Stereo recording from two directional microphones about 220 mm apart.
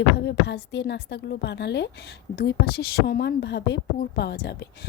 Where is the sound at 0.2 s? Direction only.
50° left (ahead or behind).